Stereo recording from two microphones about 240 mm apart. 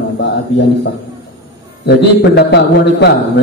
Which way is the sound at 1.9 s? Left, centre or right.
Left.